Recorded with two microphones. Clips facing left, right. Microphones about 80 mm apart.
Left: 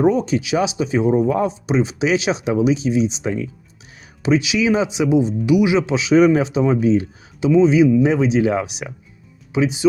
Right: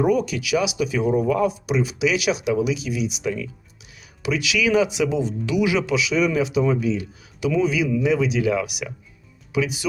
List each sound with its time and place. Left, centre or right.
0.0 s speech: left